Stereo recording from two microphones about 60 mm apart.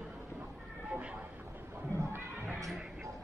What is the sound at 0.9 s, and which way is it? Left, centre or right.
Vehicle, right.